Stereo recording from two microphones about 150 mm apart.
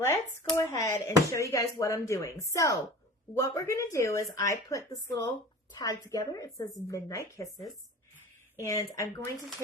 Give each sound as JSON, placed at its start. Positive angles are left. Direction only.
{"t": 0.0, "sound": "speech", "side_deg": 15}
{"t": 8.5, "sound": "speech", "side_deg": 20}